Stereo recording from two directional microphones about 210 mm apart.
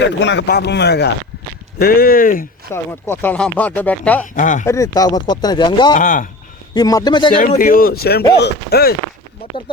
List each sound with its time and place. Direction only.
0.0 s speech: 60° left (ahead or behind); by 2.5 s 40° left (ahead or behind)
2.7 s speech: 10° left (ahead or behind)
4.4 s speech: 35° left (ahead or behind)
4.6 s speech: 15° left (ahead or behind)
6.0 s speech: 40° left (ahead or behind)
6.7 s speech: 20° left (ahead or behind)
7.3 s speech: 40° left (ahead or behind)